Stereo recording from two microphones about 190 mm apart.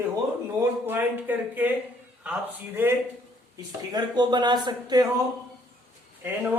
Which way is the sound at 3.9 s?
20° right (ahead or behind).